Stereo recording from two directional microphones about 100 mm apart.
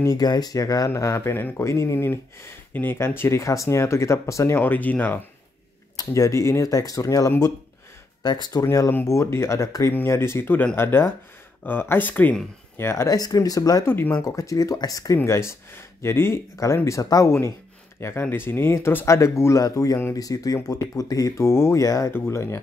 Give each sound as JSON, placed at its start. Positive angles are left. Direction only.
{"t": 0.0, "sound": "speech", "side_deg": 40}
{"t": 4.6, "sound": "speech", "side_deg": 20}
{"t": 5.9, "sound": "speech", "side_deg": 35}
{"t": 8.6, "sound": "speech", "side_deg": 30}
{"t": 12.7, "sound": "speech", "side_deg": 25}
{"t": 13.8, "sound": "speech", "side_deg": 20}
{"t": 14.2, "sound": "speech", "side_deg": 30}